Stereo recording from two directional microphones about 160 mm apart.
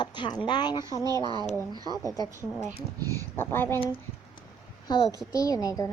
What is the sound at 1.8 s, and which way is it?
Speech, 25° right (ahead or behind).